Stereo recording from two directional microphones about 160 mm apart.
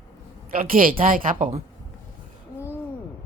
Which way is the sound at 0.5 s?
60° right (ahead or behind).